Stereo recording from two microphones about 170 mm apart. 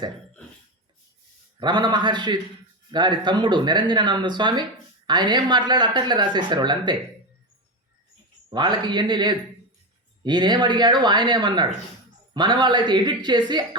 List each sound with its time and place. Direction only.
1.5 s speech: 25° right (ahead or behind)
8.4 s speech: 25° right (ahead or behind)